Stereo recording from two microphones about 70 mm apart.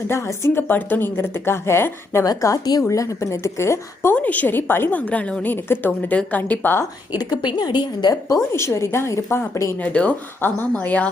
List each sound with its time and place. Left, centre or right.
0.1 s a woman's voice: left
0.7 s speech: left
2.2 s a woman's voice: left
4.1 s a woman's voice: left
4.9 s a woman's voice: centre
7.1 s a woman's voice: left
8.5 s speech: left
9.7 s a woman's voice: left